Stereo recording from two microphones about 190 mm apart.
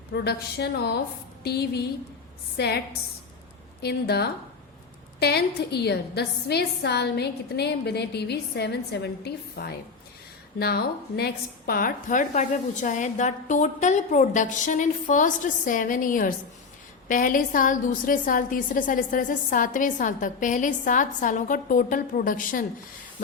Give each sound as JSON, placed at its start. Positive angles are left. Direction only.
{"t": 0.1, "sound": "a woman's voice", "side_deg": 60}
{"t": 3.8, "sound": "a woman's voice", "side_deg": 55}